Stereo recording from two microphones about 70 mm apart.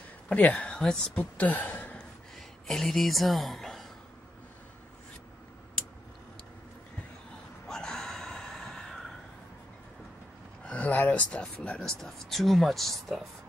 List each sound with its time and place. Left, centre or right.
0.3 s speech: centre
2.0 s a sound: centre
7.6 s gasp: centre
10.6 s speech: centre
11.8 s speech: centre